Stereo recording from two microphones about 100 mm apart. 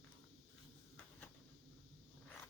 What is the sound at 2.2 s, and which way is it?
Insect, 10° left (ahead or behind).